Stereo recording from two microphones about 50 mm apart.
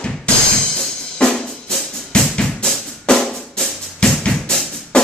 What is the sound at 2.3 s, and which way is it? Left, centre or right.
Drum, centre.